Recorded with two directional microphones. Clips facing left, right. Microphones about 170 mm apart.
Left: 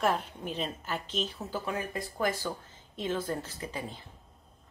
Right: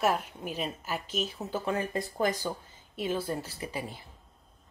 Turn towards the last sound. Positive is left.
turn(degrees=-10)  # may be behind; listen again after turning